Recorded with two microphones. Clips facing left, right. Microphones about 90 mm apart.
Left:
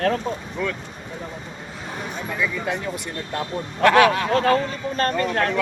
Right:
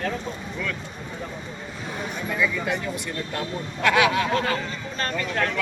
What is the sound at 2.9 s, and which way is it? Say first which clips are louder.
Speech: left 1 dB; 45° left (ahead or behind).